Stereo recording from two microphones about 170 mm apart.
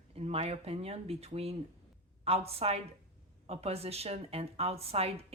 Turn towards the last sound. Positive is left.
turn(degrees=-35)  # may be behind; listen again after turning